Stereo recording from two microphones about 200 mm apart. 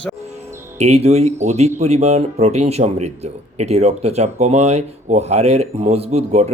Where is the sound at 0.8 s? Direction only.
35° right (ahead or behind).